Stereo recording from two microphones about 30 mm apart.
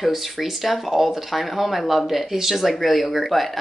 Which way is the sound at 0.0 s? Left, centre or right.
Centre.